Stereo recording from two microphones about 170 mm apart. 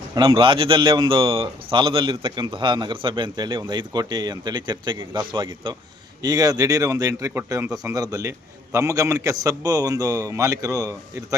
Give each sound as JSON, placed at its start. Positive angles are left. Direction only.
{"t": 0.1, "sound": "a man's voice", "side_deg": -30}